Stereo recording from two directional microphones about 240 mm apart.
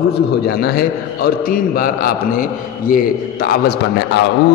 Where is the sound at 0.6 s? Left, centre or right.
Left.